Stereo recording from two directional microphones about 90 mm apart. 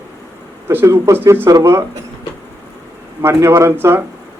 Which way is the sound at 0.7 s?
25° right (ahead or behind).